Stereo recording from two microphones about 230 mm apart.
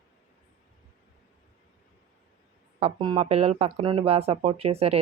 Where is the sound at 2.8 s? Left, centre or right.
Right.